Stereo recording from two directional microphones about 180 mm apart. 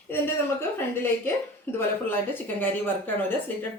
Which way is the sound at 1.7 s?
10° left (ahead or behind).